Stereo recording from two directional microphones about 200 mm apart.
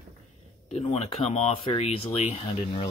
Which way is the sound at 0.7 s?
30° left (ahead or behind).